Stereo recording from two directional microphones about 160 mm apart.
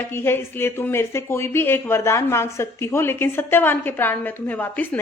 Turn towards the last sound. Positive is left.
turn(degrees=10)  # may be behind; listen again after turning